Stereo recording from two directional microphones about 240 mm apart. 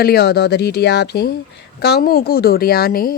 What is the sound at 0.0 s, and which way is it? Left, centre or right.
A woman's voice, left.